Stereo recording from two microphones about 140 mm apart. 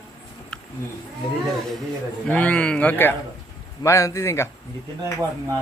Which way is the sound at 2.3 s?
10° left (ahead or behind).